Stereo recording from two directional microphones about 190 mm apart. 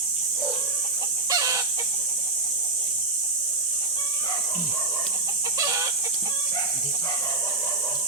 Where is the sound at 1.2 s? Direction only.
20° right (ahead or behind).